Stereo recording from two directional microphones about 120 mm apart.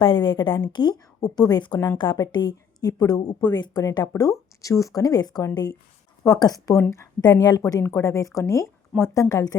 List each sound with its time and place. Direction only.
0.0 s a woman's voice: 40° left (ahead or behind); by 8.7 s 25° left (ahead or behind)
8.9 s speech: 5° right (ahead or behind)
9.3 s a woman's voice: 30° left (ahead or behind)